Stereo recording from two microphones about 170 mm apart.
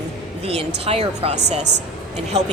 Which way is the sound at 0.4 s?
35° right (ahead or behind).